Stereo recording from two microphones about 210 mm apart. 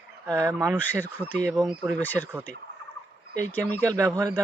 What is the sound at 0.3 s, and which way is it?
Speech, 15° right (ahead or behind).